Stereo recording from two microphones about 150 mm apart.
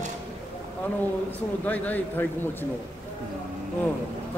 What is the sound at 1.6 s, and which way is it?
Speech, 10° left (ahead or behind).